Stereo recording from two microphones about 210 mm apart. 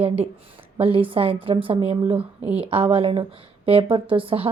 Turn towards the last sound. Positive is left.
turn(degrees=-25)  # may be behind; listen again after turning